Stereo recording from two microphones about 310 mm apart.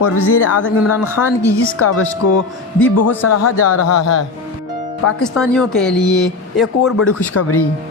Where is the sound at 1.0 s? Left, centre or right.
Centre.